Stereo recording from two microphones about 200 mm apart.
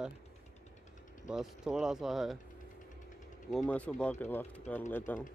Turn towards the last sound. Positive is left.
turn(degrees=10)  # may be behind; listen again after turning